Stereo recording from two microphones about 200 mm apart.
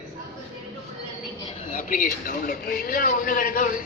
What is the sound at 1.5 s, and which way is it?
Speech, 40° left (ahead or behind).